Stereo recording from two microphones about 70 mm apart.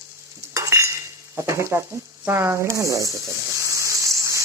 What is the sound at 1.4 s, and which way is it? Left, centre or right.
Speech, right.